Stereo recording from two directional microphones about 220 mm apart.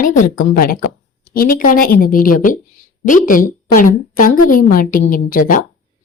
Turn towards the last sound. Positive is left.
turn(degrees=40)  # may be behind; listen again after turning